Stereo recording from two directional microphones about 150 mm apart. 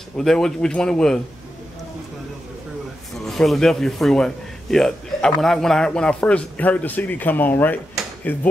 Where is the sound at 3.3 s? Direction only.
Centre (ahead or behind).